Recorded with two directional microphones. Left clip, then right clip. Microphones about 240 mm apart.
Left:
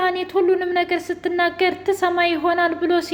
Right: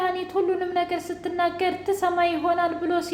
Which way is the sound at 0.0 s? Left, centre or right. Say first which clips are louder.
Left 5 dB; left.